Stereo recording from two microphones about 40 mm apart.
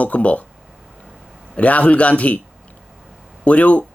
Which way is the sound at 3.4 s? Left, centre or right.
Left.